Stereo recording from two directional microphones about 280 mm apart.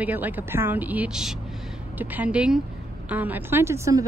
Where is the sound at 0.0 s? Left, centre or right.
Centre.